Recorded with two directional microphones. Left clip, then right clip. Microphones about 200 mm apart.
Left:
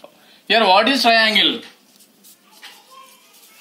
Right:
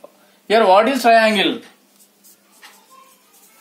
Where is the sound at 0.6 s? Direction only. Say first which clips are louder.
Right 1 dB; 40° right (ahead or behind).